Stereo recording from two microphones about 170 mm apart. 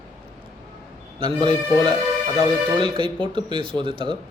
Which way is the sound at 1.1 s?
30° right (ahead or behind).